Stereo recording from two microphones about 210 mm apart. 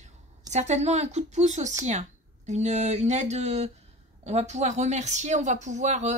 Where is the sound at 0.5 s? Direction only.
35° right (ahead or behind).